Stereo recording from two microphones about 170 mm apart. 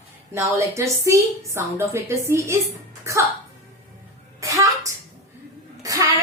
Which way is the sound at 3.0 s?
15° right (ahead or behind).